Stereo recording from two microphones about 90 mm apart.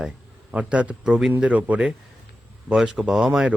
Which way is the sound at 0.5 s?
15° right (ahead or behind).